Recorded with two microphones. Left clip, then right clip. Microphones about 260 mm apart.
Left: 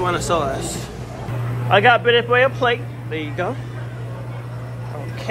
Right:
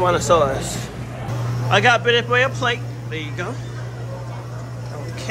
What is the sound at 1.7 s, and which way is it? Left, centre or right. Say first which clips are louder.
A man's voice: left 2 dB; centre.